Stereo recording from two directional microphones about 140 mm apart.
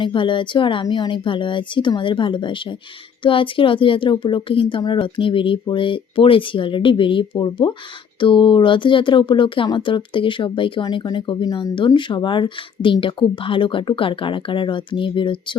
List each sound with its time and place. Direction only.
0.0 s speech: 35° left (ahead or behind)